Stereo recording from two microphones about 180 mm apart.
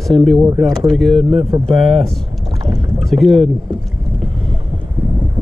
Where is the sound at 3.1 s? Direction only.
Centre (ahead or behind).